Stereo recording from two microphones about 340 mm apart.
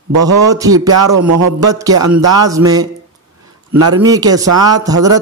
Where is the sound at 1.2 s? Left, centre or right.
Right.